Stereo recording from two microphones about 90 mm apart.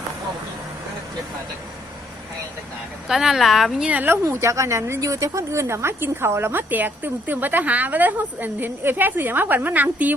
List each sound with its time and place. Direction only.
3.1 s speech: 5° right (ahead or behind)
3.8 s speech: 20° right (ahead or behind)
4.2 s a woman's voice: 30° right (ahead or behind)